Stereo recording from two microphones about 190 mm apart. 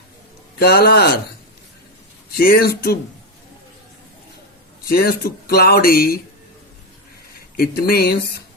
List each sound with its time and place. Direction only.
0.6 s speech: 55° left (ahead or behind)
2.3 s speech: 50° left (ahead or behind)
4.9 s speech: 50° left (ahead or behind)
7.5 s speech: 55° left (ahead or behind)